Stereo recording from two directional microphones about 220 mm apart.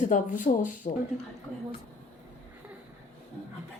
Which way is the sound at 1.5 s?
5° left (ahead or behind).